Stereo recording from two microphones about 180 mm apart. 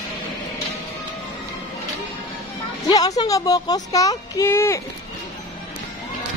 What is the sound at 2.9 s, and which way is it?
Speech, 20° left (ahead or behind).